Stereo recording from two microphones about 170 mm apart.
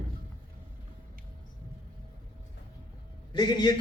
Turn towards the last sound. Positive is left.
turn(degrees=25)  # may be behind; listen again after turning